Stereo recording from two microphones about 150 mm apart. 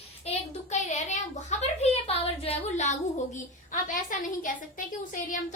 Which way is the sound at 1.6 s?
40° left (ahead or behind).